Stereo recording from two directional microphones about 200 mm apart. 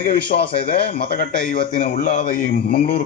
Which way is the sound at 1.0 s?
45° left (ahead or behind).